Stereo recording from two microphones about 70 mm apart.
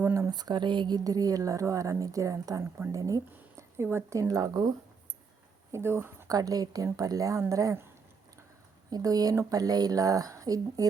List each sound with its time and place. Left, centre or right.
0.0 s a sound: right
0.3 s a woman's voice: right
5.7 s speech: right
6.2 s a woman's voice: right
8.9 s a woman's voice: right